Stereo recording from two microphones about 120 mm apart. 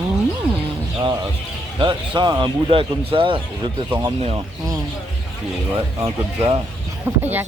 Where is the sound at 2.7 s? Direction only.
50° right (ahead or behind).